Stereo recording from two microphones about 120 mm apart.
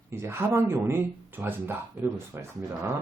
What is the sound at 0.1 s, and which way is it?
Speech, 20° right (ahead or behind).